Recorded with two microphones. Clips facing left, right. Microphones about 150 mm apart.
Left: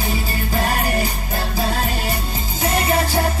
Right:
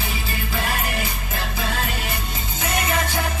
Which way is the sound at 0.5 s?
40° left (ahead or behind).